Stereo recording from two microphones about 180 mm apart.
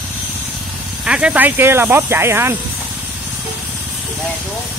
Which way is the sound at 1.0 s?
5° right (ahead or behind).